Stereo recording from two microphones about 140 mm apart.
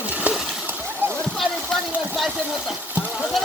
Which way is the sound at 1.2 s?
Centre (ahead or behind).